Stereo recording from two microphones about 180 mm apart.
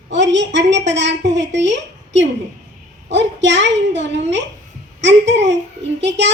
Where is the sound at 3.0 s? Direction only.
80° right.